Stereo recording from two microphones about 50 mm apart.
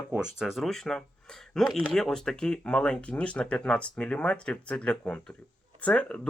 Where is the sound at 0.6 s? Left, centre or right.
Centre.